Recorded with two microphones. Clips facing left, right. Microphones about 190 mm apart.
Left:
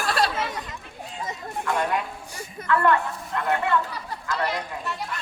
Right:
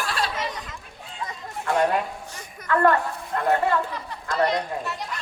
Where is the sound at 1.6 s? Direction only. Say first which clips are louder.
Right 4 dB; 50° right (ahead or behind).